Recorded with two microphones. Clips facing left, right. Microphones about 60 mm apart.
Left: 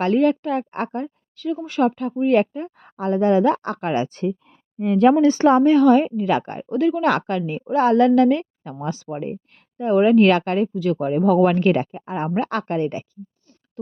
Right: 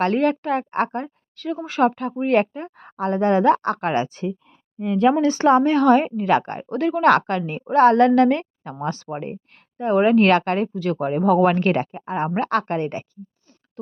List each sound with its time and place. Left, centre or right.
0.0 s a woman's voice: right
1.8 s a woman's voice: right
2.1 s speech: right
4.9 s speech: centre
5.4 s speech: right
5.8 s a woman's voice: right
6.7 s a woman's voice: right
9.0 s speech: right
11.0 s speech: right